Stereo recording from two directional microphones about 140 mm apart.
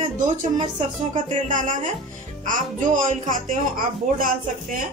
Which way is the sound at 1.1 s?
70° right (ahead or behind).